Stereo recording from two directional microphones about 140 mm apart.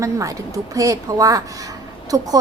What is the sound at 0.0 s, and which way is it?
A woman's voice, 25° right (ahead or behind).